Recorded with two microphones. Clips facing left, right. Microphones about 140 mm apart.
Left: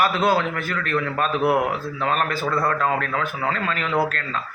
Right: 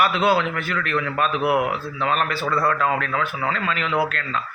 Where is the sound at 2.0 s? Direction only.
45° left (ahead or behind).